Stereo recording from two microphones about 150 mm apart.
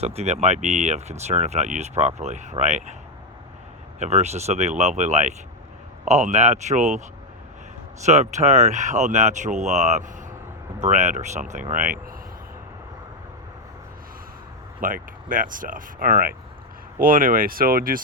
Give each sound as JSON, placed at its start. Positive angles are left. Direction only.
{"t": 0.0, "sound": "speech", "side_deg": -45}
{"t": 4.0, "sound": "speech", "side_deg": -45}
{"t": 8.0, "sound": "speech", "side_deg": -50}
{"t": 14.8, "sound": "speech", "side_deg": -65}